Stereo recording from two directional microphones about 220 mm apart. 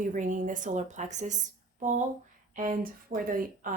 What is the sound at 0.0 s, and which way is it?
Speech, 35° right (ahead or behind).